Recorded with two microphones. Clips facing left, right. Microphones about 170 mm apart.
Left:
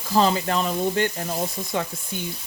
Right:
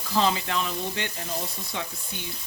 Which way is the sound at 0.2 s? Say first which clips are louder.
Left 4 dB; 40° left (ahead or behind).